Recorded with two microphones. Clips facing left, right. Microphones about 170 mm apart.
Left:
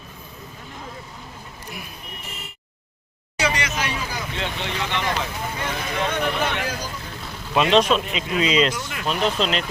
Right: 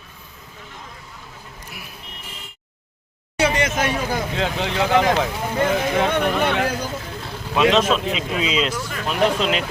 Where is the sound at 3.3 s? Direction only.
55° right (ahead or behind).